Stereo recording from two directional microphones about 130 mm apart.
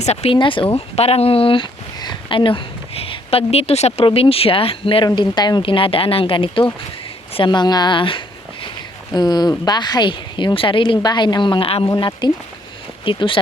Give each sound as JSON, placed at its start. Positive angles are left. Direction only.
{"t": 0.0, "sound": "speech", "side_deg": 55}
{"t": 0.3, "sound": "a woman's voice", "side_deg": 40}